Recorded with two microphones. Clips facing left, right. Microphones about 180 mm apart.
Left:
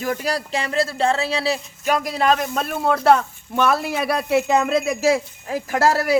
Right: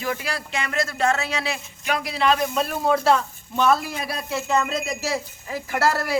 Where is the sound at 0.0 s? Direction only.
40° left (ahead or behind); by 4.5 s 70° left (ahead or behind).